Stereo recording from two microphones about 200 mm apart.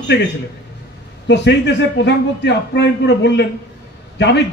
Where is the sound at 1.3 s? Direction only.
60° left (ahead or behind).